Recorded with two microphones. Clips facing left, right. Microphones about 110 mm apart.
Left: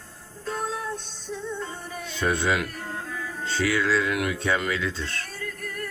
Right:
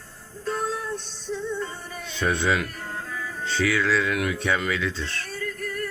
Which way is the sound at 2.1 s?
45° left (ahead or behind).